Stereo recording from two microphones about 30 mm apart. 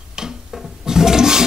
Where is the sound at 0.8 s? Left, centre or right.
Centre.